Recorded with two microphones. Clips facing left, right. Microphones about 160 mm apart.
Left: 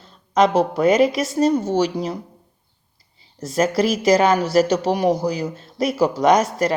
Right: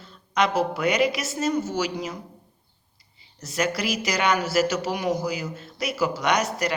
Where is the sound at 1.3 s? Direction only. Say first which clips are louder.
Left 9 dB; 35° left (ahead or behind).